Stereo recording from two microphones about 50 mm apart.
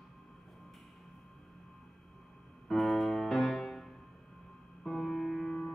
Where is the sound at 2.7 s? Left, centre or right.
Centre.